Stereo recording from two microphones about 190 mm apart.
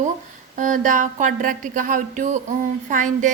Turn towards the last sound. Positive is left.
turn(degrees=-40)  # may be behind; listen again after turning